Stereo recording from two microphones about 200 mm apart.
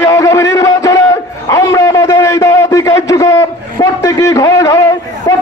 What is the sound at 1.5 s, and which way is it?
A man's voice, 15° left (ahead or behind).